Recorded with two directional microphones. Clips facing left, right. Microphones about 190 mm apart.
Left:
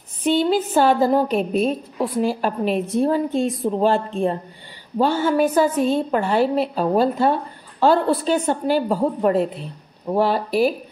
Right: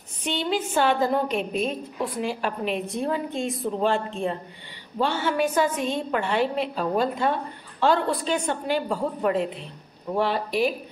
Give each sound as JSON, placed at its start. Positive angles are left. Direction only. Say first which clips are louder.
{"t": 0.2, "sound": "a woman's voice", "louder": "left 8 dB", "side_deg": 40}